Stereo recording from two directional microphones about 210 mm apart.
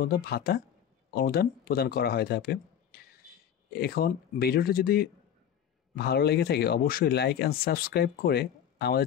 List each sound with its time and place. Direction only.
0.0 s speech: 45° left (ahead or behind)